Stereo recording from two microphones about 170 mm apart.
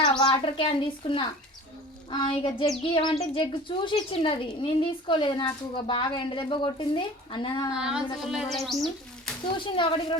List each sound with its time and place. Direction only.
0.0 s a woman's voice: 25° left (ahead or behind)
7.7 s a child's voice: 5° right (ahead or behind)
9.5 s speech: 30° left (ahead or behind)